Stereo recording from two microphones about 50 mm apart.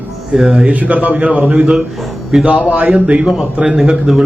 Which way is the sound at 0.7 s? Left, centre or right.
Right.